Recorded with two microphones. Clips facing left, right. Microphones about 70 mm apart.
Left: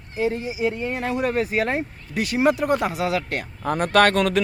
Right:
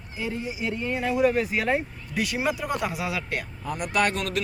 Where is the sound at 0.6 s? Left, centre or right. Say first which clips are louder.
Left 7 dB; left.